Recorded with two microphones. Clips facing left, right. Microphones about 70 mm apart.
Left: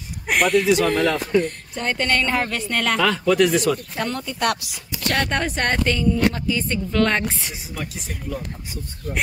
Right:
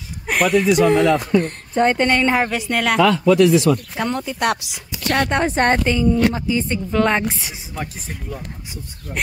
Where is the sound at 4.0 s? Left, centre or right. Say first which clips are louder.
Right 3 dB; centre.